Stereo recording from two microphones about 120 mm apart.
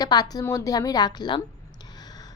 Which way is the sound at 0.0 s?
35° left (ahead or behind).